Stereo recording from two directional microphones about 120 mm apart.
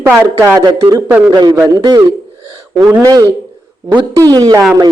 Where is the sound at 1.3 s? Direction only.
40° right (ahead or behind).